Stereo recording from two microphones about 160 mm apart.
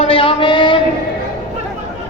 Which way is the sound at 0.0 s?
35° left (ahead or behind).